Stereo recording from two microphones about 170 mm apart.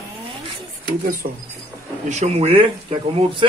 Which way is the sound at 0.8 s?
60° right (ahead or behind).